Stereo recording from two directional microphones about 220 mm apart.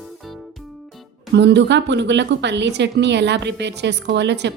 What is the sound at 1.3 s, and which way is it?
A woman's voice, 50° right (ahead or behind).